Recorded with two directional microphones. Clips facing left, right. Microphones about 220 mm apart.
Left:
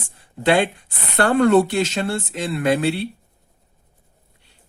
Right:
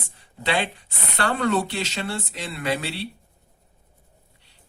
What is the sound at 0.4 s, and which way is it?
Speech, 50° left (ahead or behind).